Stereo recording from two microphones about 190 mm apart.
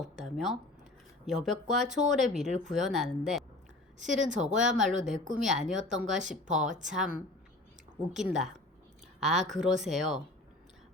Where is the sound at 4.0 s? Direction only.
40° right (ahead or behind).